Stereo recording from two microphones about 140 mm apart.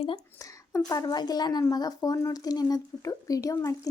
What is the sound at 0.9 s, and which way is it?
Speech, 25° left (ahead or behind).